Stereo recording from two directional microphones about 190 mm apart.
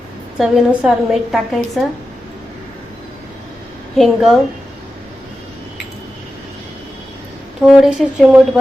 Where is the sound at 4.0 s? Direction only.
Centre (ahead or behind).